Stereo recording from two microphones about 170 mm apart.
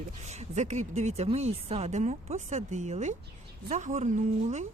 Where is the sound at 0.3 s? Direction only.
40° right (ahead or behind).